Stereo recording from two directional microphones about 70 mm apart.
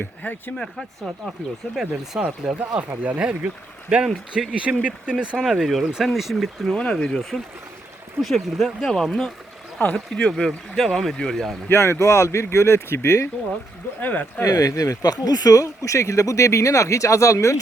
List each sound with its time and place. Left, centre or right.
0.0 s speech: left
0.5 s speech: centre
1.7 s speech: centre
2.6 s speech: right; by 6.7 s centre
6.7 s speech: centre
9.7 s speech: left
10.2 s speech: centre
11.7 s speech: left
14.0 s speech: left
14.4 s speech: left